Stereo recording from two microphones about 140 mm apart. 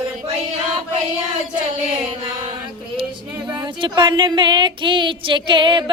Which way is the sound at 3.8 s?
35° right (ahead or behind).